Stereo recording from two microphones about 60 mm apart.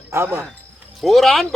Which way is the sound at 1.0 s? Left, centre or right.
Centre.